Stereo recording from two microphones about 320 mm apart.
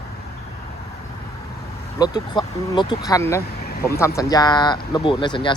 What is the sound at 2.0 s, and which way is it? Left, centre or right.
Speech, centre.